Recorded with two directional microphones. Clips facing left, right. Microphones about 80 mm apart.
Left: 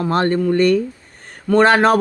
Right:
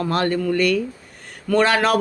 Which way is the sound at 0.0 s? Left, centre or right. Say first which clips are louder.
Left 4 dB; left.